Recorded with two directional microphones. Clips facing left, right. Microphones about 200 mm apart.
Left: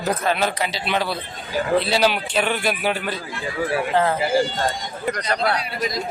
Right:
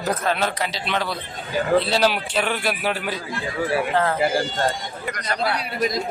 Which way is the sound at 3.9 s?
15° left (ahead or behind).